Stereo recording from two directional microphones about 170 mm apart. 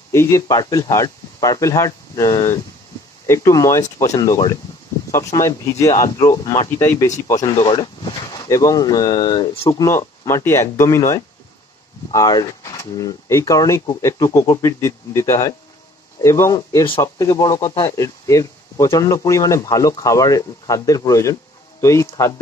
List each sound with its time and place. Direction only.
0.1 s speech: 15° left (ahead or behind)